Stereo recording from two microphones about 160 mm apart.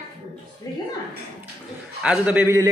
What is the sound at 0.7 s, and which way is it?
Music, 20° left (ahead or behind).